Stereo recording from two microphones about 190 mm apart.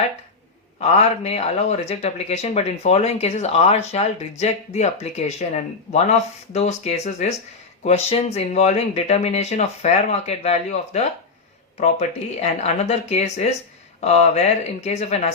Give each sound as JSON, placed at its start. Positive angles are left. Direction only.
{"t": 0.8, "sound": "speech", "side_deg": 35}